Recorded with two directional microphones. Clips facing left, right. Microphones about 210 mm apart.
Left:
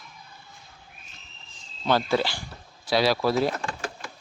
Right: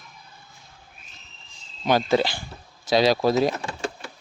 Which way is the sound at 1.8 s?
15° right (ahead or behind).